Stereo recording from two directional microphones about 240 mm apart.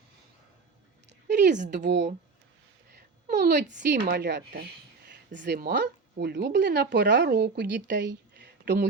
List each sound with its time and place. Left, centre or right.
1.5 s speech: right
1.7 s a woman's voice: right
3.2 s a sound: right
3.8 s a woman's voice: right